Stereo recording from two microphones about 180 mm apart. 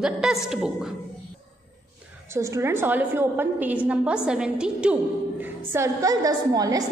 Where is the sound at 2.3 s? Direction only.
15° right (ahead or behind).